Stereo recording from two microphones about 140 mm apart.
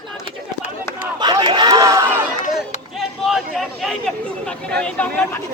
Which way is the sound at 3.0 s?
Centre (ahead or behind).